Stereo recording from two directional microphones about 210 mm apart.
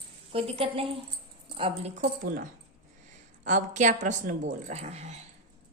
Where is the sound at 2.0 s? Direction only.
40° right (ahead or behind).